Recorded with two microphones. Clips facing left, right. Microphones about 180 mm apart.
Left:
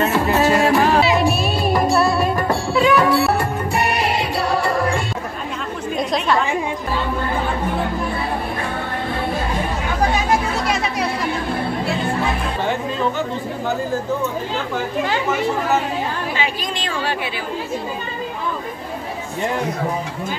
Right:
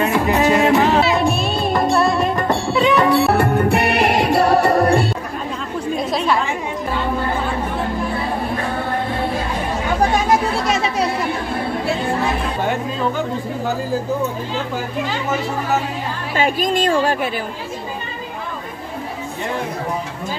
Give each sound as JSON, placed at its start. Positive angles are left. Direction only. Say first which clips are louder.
{"t": 0.0, "sound": "music", "louder": "right 1 dB", "side_deg": -15}
{"t": 1.0, "sound": "music", "louder": "even", "side_deg": 5}
{"t": 3.3, "sound": "music", "louder": "right 5 dB", "side_deg": -60}
{"t": 10.7, "sound": "chatter", "louder": "right 3 dB", "side_deg": -25}
{"t": 16.3, "sound": "a woman's voice", "louder": "right 7 dB", "side_deg": -45}